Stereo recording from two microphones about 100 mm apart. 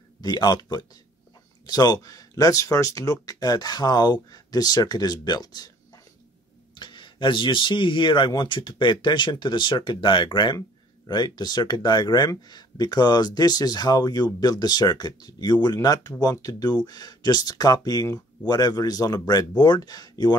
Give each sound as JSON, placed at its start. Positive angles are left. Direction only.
{"t": 0.2, "sound": "speech", "side_deg": 45}
{"t": 6.7, "sound": "speech", "side_deg": 50}